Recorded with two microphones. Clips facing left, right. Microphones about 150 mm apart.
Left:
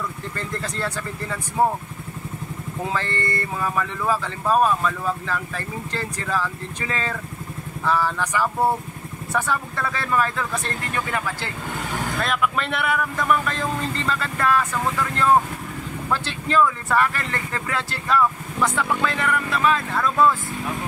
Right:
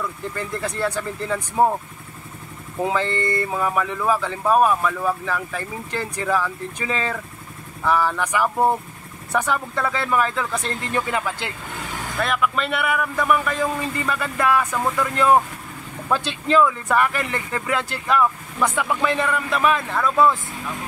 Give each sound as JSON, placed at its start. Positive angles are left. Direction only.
{"t": 0.4, "sound": "speech", "side_deg": -15}
{"t": 2.8, "sound": "speech", "side_deg": -15}
{"t": 12.3, "sound": "speech", "side_deg": 0}